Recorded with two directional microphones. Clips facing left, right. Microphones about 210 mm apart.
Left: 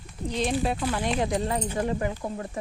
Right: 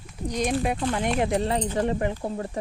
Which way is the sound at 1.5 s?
30° right (ahead or behind).